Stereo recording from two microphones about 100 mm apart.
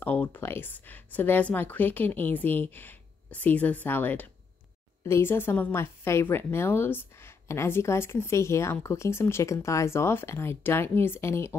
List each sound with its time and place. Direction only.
0.0 s speech: 15° left (ahead or behind)